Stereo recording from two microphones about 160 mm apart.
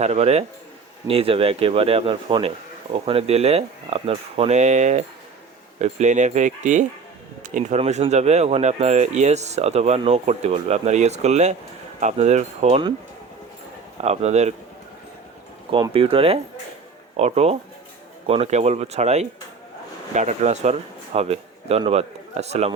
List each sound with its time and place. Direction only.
0.0 s speech: 40° right (ahead or behind)
14.0 s speech: 45° right (ahead or behind)
15.7 s speech: 35° right (ahead or behind)